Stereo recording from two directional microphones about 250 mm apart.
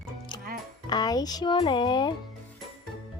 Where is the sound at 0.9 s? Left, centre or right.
Centre.